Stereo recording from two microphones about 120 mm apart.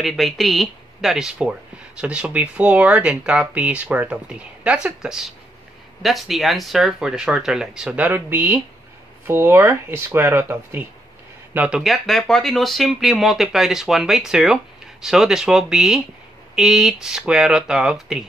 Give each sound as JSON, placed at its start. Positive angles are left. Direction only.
{"t": 0.0, "sound": "speech", "side_deg": 0}